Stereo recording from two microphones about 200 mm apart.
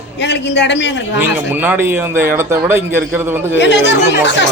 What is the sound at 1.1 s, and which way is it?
Speech, 10° right (ahead or behind).